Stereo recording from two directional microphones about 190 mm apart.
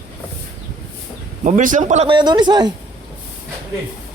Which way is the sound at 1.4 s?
40° right (ahead or behind).